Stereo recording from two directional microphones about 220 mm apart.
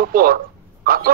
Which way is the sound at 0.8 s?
40° right (ahead or behind).